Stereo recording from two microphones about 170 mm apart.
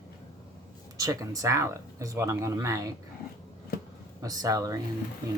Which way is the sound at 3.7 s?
65° left (ahead or behind).